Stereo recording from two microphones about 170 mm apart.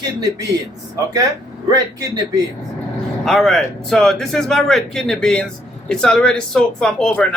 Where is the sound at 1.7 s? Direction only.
20° right (ahead or behind).